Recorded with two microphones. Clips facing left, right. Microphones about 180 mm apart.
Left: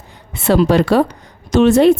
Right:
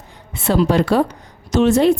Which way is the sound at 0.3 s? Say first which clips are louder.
Left 3 dB; 80° left.